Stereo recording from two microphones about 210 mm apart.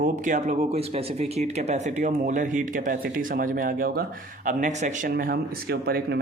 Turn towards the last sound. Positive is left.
turn(degrees=-50)  # may be behind; listen again after turning